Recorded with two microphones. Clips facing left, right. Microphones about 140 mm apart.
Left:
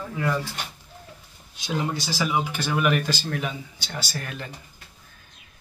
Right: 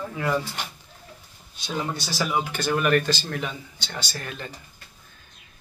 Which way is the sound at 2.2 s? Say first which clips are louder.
Right 1 dB; 10° left (ahead or behind).